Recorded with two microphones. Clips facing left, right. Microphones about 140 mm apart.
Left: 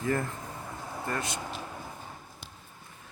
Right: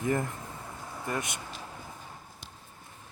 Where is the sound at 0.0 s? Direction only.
15° right (ahead or behind).